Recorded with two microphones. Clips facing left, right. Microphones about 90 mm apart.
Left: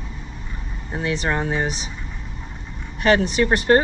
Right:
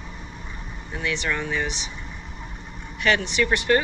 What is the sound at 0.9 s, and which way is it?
Speech, 35° left (ahead or behind).